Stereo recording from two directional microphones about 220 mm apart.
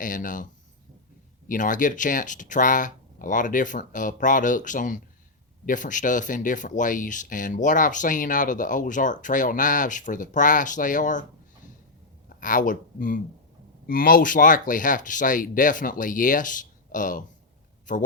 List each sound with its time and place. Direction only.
0.0 s speech: 35° left (ahead or behind)
1.5 s speech: 35° left (ahead or behind)
12.3 s speech: 35° left (ahead or behind)